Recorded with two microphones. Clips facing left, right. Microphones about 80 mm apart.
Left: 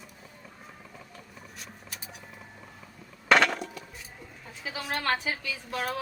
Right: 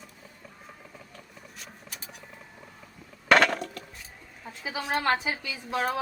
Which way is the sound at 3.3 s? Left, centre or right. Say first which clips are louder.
Right 1 dB; centre.